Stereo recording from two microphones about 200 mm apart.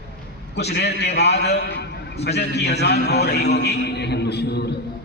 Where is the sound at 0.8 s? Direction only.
55° left (ahead or behind).